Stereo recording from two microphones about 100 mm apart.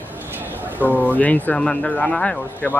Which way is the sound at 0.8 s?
15° right (ahead or behind).